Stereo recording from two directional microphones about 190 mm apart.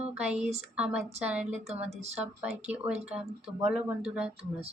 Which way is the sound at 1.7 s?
35° right (ahead or behind).